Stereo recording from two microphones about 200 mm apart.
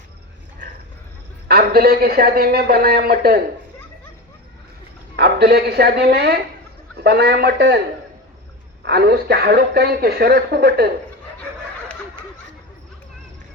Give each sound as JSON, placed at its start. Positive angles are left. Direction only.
{"t": 1.5, "sound": "speech", "side_deg": -50}
{"t": 5.1, "sound": "a man's voice", "side_deg": -55}
{"t": 8.8, "sound": "speech", "side_deg": -55}